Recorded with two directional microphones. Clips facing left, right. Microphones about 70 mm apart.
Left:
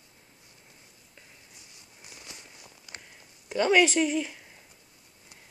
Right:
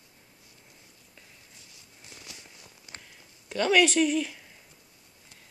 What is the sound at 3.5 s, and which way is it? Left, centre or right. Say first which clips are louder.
Speech: left 1 dB; centre.